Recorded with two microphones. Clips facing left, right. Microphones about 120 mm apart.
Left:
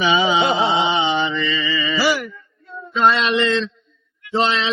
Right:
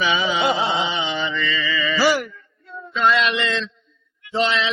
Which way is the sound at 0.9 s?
30° left (ahead or behind).